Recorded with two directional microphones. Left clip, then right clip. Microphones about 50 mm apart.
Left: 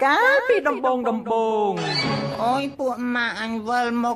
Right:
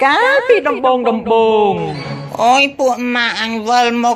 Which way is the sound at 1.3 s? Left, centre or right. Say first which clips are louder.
Right 10 dB; centre.